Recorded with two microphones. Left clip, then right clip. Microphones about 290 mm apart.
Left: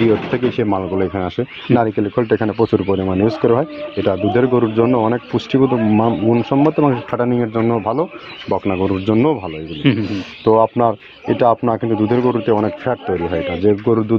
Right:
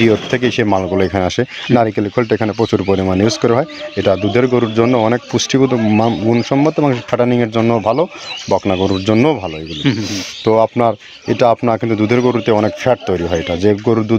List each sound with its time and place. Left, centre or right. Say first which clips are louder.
0.0 s speech: right 2 dB; right